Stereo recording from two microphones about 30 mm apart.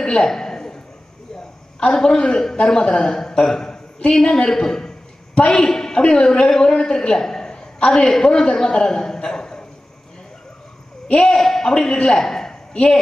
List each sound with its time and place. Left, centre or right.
0.0 s a man's voice: left
0.3 s a sound: centre
2.0 s a man's voice: left
5.3 s a man's voice: left
5.6 s a woman's voice: centre
11.1 s a man's voice: left